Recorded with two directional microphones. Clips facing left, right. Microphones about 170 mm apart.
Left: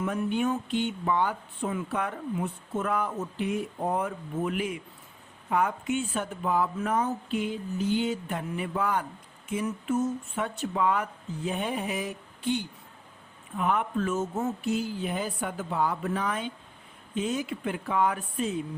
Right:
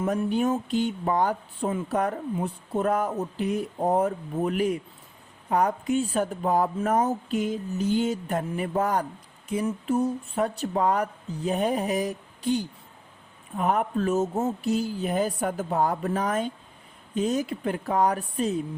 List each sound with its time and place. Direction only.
0.0 s speech: 35° right (ahead or behind)